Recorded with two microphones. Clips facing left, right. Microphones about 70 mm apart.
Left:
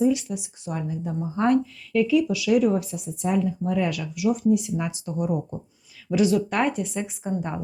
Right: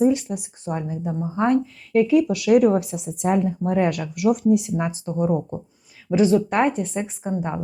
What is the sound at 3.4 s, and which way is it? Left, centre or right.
Speech, right.